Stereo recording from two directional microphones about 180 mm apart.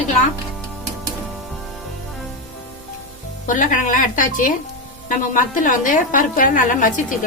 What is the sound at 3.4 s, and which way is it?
A woman's voice, 45° left (ahead or behind).